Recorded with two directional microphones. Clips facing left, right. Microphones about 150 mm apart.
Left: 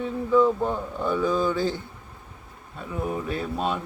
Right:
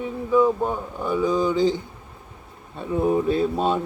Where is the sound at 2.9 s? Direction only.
30° right (ahead or behind).